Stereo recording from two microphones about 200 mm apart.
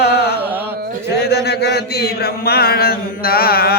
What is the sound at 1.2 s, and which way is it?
Chant, 55° left (ahead or behind).